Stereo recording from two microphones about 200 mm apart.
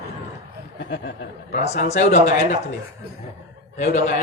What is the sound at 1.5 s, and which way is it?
A man's voice, 35° left (ahead or behind).